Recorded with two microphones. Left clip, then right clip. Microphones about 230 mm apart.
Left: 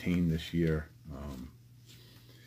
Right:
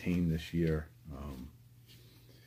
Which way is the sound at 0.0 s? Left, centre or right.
Centre.